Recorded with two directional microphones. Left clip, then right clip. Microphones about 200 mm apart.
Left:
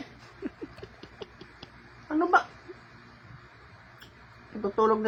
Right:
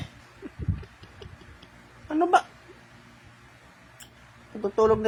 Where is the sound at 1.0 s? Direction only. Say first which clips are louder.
Left 3 dB; 15° left (ahead or behind).